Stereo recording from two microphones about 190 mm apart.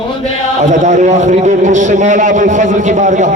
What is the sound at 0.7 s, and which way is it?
A man's voice, 40° right (ahead or behind).